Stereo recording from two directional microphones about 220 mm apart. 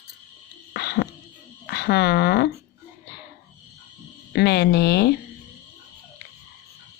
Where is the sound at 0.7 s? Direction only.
45° left (ahead or behind).